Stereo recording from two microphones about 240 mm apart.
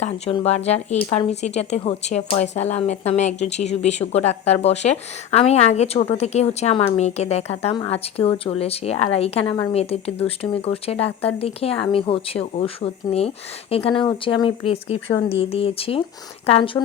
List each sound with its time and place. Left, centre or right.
0.0 s speech: left